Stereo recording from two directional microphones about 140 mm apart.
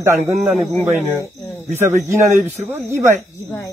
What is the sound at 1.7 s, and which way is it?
Speech, 20° right (ahead or behind).